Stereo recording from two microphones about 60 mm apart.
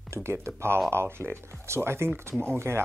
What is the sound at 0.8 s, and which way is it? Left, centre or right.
Speech, right.